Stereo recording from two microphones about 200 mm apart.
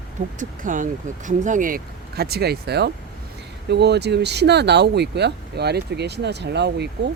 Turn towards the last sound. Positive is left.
turn(degrees=-55)  # may be behind; listen again after turning